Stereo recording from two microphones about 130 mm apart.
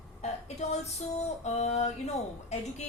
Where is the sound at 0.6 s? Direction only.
60° left (ahead or behind).